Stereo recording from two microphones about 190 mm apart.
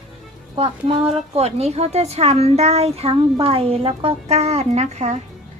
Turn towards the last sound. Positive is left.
turn(degrees=-35)  # may be behind; listen again after turning